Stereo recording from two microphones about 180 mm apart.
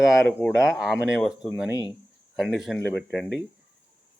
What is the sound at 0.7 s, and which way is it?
Speech, 5° right (ahead or behind).